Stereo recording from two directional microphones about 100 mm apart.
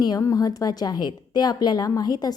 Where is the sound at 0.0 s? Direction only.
40° left (ahead or behind).